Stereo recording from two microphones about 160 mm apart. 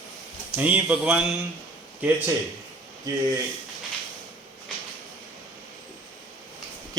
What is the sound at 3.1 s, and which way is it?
Speech, 25° right (ahead or behind).